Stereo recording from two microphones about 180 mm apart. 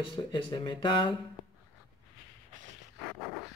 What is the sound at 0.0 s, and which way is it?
Speech, 25° left (ahead or behind).